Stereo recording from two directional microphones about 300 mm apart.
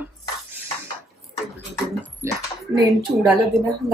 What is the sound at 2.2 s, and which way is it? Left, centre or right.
Speech, centre.